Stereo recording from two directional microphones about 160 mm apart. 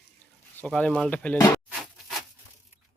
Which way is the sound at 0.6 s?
5° left (ahead or behind).